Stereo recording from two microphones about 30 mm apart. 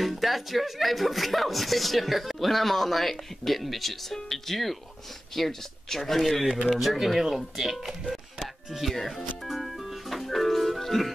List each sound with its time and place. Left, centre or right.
0.0 s speech: centre
9.5 s music: centre